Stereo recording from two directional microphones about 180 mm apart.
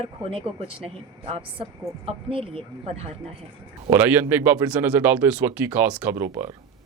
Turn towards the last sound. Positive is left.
turn(degrees=-15)  # may be behind; listen again after turning